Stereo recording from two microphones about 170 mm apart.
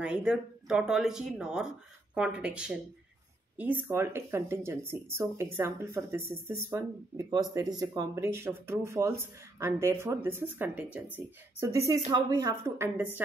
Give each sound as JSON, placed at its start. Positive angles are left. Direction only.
{"t": 0.0, "sound": "speech", "side_deg": -5}